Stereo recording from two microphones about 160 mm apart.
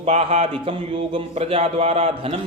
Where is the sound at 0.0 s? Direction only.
40° right (ahead or behind).